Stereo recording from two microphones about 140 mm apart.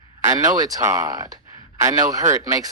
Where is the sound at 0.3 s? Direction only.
25° right (ahead or behind).